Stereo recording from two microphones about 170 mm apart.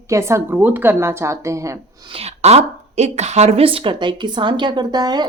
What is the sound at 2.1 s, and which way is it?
Speech, 40° right (ahead or behind).